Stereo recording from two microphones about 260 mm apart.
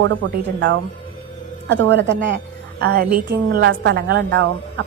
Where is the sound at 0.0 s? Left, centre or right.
Right.